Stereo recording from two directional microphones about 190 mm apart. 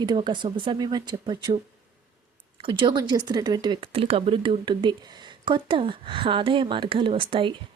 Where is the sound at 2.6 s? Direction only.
25° right (ahead or behind).